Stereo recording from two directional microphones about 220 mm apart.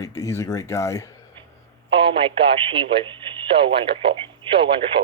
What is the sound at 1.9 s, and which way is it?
Speech, 25° right (ahead or behind).